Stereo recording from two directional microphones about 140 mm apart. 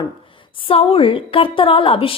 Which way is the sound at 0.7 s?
40° left (ahead or behind).